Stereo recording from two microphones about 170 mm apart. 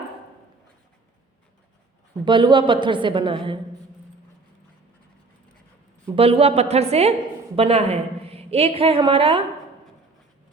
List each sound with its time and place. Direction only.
2.2 s a woman's voice: 30° right (ahead or behind)
6.1 s a woman's voice: 35° right (ahead or behind)